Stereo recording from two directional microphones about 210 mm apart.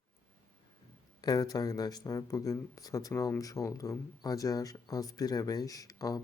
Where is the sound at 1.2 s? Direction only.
20° left (ahead or behind).